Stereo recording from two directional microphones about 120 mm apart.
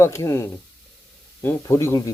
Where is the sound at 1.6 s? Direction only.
25° left (ahead or behind).